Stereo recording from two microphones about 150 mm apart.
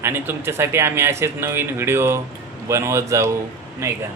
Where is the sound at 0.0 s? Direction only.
15° right (ahead or behind).